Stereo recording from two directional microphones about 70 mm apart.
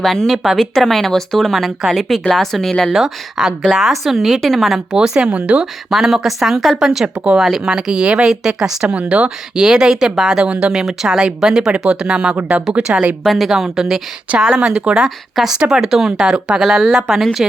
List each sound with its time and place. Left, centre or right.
0.0 s speech: centre
2.9 s speech: centre
5.9 s speech: centre
8.9 s speech: centre
13.2 s speech: centre
14.3 s speech: centre